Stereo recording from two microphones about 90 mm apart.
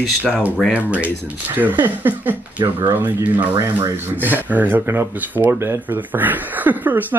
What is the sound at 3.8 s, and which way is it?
Speech, 20° right (ahead or behind).